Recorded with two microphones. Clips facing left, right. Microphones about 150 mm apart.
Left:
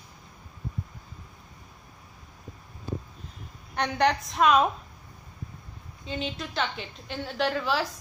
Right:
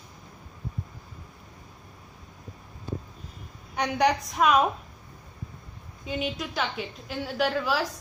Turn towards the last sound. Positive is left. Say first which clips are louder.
# right 1 dB
turn(degrees=-5)  # may be behind; listen again after turning